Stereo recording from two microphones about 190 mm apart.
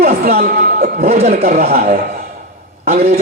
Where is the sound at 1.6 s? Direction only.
55° right (ahead or behind).